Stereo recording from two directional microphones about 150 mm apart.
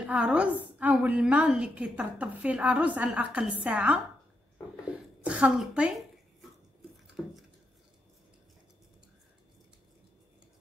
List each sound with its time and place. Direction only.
0.0 s a woman's voice: 5° right (ahead or behind)
5.2 s a woman's voice: 5° right (ahead or behind)